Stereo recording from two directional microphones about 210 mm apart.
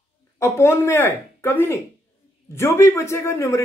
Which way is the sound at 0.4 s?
10° left (ahead or behind).